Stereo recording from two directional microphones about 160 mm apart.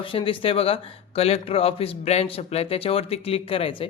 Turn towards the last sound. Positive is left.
turn(degrees=35)  # may be behind; listen again after turning